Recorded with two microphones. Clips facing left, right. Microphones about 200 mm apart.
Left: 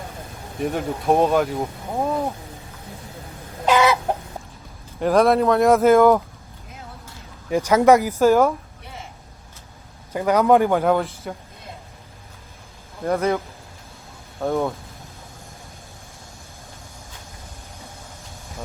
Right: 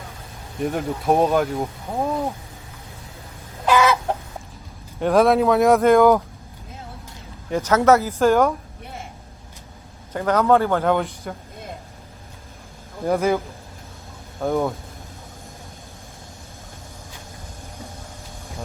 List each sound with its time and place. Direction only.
0.6 s speech: centre (ahead or behind)
3.7 s chicken: 20° left (ahead or behind)
4.9 s speech: centre (ahead or behind)
7.5 s a man's voice: 10° left (ahead or behind)
8.2 s speech: centre (ahead or behind)
10.1 s a man's voice: 10° left (ahead or behind)
13.1 s speech: centre (ahead or behind)
14.4 s speech: centre (ahead or behind)